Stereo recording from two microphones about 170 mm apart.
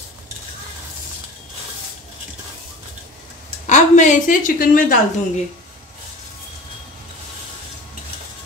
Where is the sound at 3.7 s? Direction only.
45° left (ahead or behind).